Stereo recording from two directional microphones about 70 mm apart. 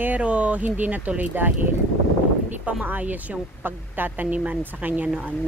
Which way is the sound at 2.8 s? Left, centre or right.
Right.